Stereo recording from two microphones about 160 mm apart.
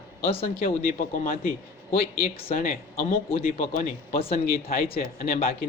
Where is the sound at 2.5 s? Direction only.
60° left (ahead or behind).